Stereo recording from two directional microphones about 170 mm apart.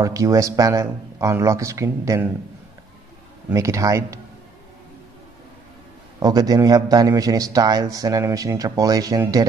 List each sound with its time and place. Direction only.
0.0 s a man's voice: 20° right (ahead or behind)
3.5 s a man's voice: 20° right (ahead or behind)
6.1 s a man's voice: 20° right (ahead or behind)